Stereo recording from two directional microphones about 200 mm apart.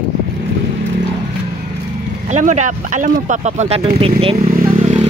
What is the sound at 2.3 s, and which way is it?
Speech, 35° right (ahead or behind).